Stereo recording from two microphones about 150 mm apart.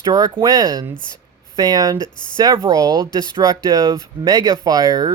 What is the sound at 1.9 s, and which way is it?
Speech, 30° left (ahead or behind).